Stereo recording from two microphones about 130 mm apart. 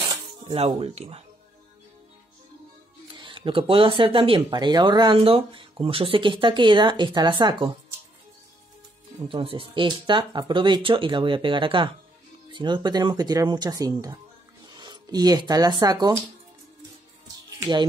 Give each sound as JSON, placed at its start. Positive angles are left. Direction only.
{"t": 0.0, "sound": "music", "side_deg": -30}
{"t": 0.7, "sound": "speech", "side_deg": -50}
{"t": 3.2, "sound": "speech", "side_deg": -40}
{"t": 9.3, "sound": "speech", "side_deg": -40}
{"t": 17.6, "sound": "speech", "side_deg": -35}